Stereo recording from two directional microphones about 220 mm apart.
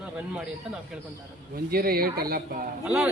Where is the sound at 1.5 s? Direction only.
45° right (ahead or behind).